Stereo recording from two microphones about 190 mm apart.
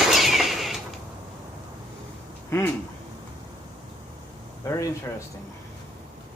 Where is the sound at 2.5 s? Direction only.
15° left (ahead or behind).